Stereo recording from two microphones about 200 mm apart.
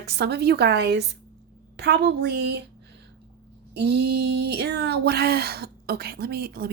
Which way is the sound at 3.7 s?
55° right (ahead or behind).